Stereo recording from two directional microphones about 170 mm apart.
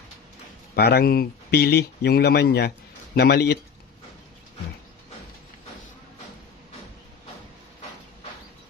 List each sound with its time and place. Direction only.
0.8 s speech: 70° left (ahead or behind)